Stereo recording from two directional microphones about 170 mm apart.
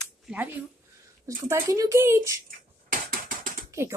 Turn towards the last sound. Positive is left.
turn(degrees=-15)  # may be behind; listen again after turning